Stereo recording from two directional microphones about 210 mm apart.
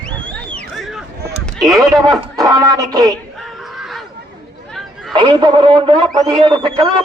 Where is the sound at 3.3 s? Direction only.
Centre (ahead or behind).